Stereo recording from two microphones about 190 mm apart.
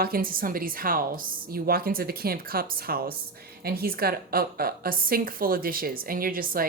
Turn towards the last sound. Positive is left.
turn(degrees=-50)  # may be behind; listen again after turning